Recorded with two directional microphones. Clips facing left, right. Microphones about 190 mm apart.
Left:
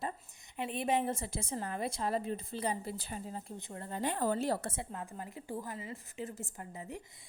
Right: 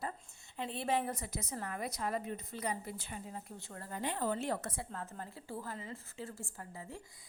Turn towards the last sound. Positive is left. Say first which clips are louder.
# left 3 dB
turn(degrees=20)  # may be behind; listen again after turning